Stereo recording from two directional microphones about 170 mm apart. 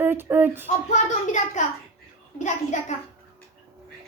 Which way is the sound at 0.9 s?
45° left (ahead or behind).